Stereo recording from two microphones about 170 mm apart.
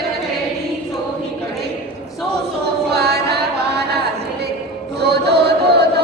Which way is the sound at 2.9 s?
70° right (ahead or behind).